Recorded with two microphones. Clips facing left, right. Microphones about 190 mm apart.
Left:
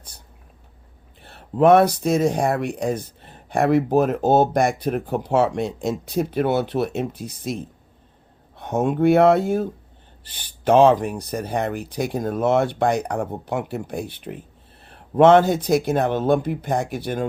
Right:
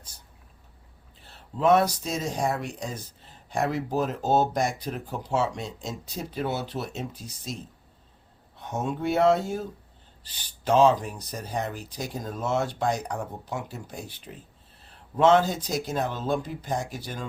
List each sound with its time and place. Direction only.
1.2 s speech: 60° left (ahead or behind)